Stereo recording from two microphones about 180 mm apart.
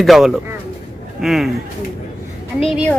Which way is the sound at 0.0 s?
Centre (ahead or behind).